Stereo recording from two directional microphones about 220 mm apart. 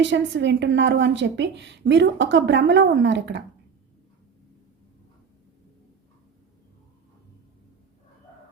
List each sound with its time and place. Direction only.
0.0 s a woman's voice: 55° right (ahead or behind)